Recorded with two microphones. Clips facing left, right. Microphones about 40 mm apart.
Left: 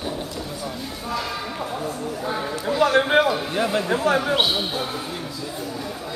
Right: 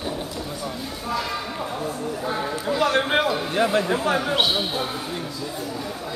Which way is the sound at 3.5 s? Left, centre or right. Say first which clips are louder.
Right 1 dB; centre.